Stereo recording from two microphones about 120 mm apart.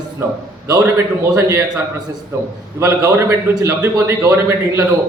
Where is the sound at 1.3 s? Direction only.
25° right (ahead or behind).